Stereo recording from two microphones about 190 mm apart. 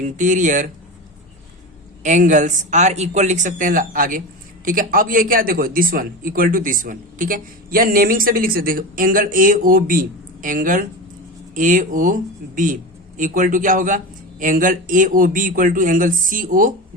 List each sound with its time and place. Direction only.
0.0 s speech: 40° right (ahead or behind)
2.0 s speech: 40° right (ahead or behind)